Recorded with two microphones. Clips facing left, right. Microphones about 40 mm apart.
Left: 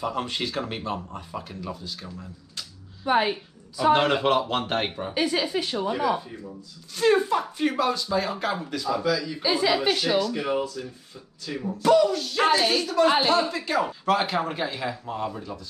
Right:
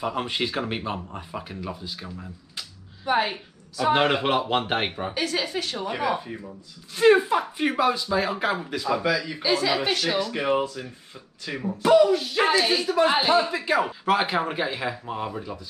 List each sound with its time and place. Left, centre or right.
0.0 s speech: centre
3.9 s speech: centre
5.1 s speech: centre
5.9 s speech: right
9.5 s speech: centre
10.1 s speech: right
11.4 s speech: centre